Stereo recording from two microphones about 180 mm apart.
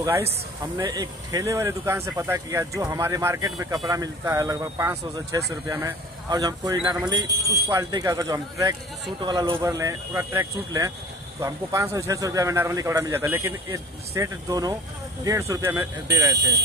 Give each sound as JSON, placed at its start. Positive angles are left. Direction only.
{"t": 0.0, "sound": "speech", "side_deg": -15}